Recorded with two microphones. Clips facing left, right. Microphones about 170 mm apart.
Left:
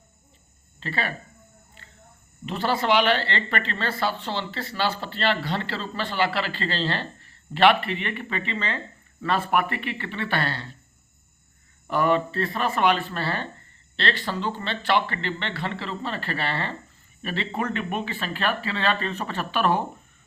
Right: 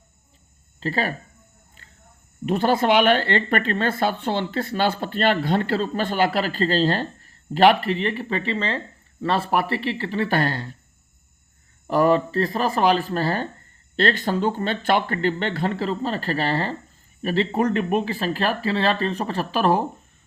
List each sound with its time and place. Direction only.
0.8 s speech: 40° right (ahead or behind)
2.5 s speech: 50° right (ahead or behind)
11.9 s speech: 35° right (ahead or behind)